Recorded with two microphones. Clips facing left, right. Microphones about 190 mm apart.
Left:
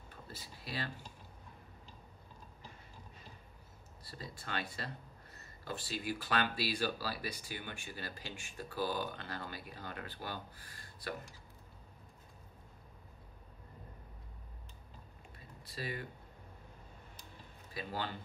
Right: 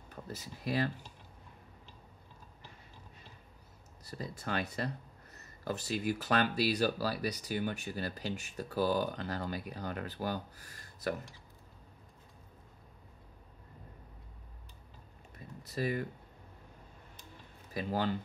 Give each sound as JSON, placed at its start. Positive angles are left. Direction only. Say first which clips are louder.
{"t": 0.1, "sound": "speech", "louder": "right 8 dB", "side_deg": -45}
{"t": 4.0, "sound": "speech", "louder": "right 7 dB", "side_deg": -45}
{"t": 15.6, "sound": "speech", "louder": "right 8 dB", "side_deg": -45}
{"t": 17.7, "sound": "speech", "louder": "right 7 dB", "side_deg": -45}